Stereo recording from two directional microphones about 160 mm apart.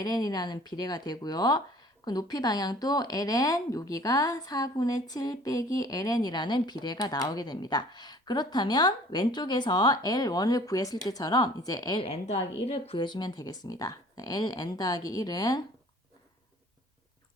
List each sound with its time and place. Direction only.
0.0 s speech: 25° left (ahead or behind)
12.0 s speech: 40° left (ahead or behind); by 15.6 s 25° left (ahead or behind)